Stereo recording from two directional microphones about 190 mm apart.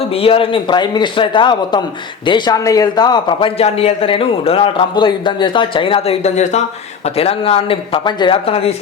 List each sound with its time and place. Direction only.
0.1 s a man's voice: 30° left (ahead or behind)